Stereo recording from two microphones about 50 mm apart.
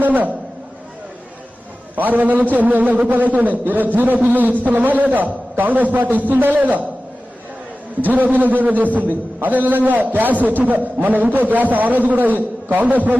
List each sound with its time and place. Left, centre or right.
0.0 s a man's voice: right
2.0 s a man's voice: right
8.0 s a man's voice: right